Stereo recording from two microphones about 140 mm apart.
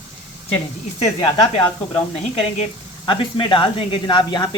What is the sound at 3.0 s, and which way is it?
Speech, 35° left (ahead or behind).